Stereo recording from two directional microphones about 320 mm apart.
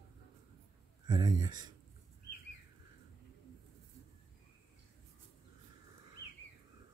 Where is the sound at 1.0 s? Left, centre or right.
Centre.